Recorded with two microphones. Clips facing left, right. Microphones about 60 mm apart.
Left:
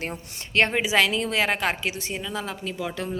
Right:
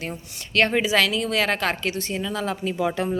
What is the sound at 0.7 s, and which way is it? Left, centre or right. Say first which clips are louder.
A woman's voice: right 1 dB; centre.